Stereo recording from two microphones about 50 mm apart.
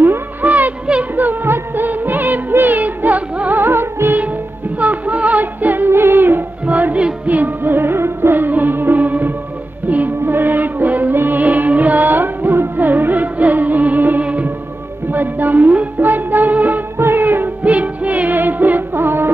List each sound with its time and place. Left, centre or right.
0.0 s music: right
4.7 s music: right
5.9 s music: right
6.7 s music: right
17.0 s music: right
17.7 s music: right